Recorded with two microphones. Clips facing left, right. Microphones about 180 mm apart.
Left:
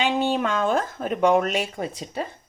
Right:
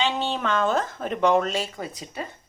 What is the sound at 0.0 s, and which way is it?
Speech, 15° left (ahead or behind).